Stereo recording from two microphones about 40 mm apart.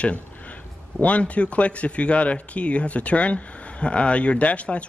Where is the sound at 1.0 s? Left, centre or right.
Left.